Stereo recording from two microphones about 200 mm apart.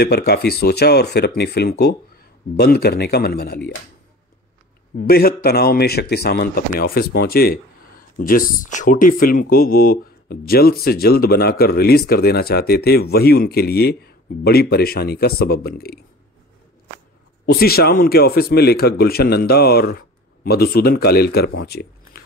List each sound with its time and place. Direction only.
0.0 s speech: 50° left (ahead or behind)
4.9 s speech: 50° left (ahead or behind)
17.5 s speech: 50° left (ahead or behind)